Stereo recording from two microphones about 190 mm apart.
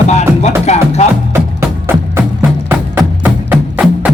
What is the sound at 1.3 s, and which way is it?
Music, 10° right (ahead or behind).